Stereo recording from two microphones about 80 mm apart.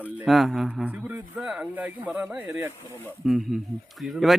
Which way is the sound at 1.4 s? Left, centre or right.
Centre.